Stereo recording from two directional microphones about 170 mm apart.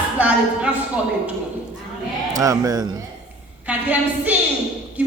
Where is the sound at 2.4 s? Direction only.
20° right (ahead or behind).